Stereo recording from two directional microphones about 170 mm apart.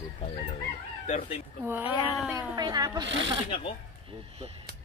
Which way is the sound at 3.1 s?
90° right.